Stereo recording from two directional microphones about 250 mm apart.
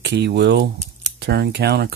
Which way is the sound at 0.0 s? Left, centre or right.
Right.